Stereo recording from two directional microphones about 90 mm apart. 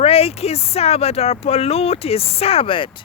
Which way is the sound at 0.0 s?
90° left.